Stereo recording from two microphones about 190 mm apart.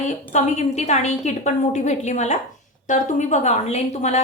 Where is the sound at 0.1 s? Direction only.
40° left (ahead or behind).